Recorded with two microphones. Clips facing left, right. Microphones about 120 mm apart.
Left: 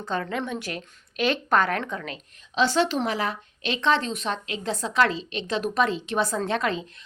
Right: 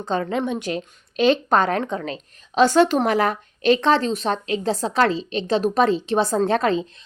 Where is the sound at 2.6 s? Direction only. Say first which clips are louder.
Right 7 dB; 50° right (ahead or behind).